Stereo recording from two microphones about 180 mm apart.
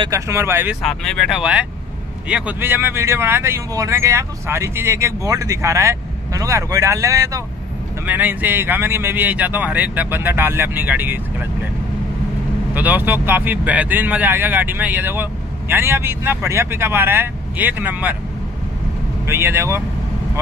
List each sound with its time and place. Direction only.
0.0 s speech: 15° right (ahead or behind)
0.8 s speech: centre (ahead or behind)
12.7 s speech: 10° right (ahead or behind)
19.2 s speech: 15° right (ahead or behind)